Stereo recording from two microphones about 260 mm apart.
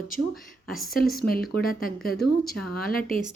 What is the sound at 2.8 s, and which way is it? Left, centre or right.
Speech, left.